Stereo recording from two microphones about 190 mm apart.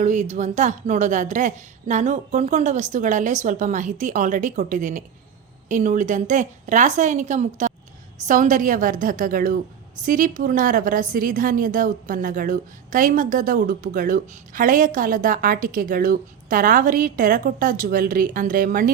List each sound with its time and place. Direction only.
0.0 s a woman's voice: 40° right (ahead or behind)